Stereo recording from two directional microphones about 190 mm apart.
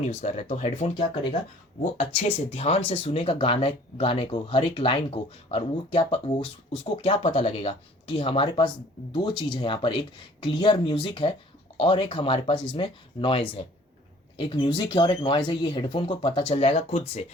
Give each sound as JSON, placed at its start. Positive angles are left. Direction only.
{"t": 0.2, "sound": "speech", "side_deg": 35}